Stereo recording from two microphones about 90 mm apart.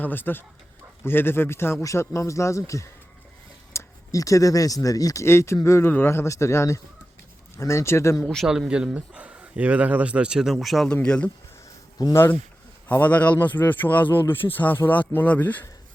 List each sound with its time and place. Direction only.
0.0 s speech: 20° left (ahead or behind); by 5.2 s 40° left (ahead or behind)
5.2 s speech: 30° left (ahead or behind)
8.2 s a man's voice: 5° left (ahead or behind)
8.4 s speech: 10° right (ahead or behind)
10.8 s speech: 10° left (ahead or behind)
12.1 s speech: 25° left (ahead or behind)